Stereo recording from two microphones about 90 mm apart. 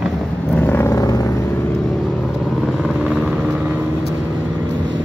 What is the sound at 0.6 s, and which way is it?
Vehicle, 25° left (ahead or behind).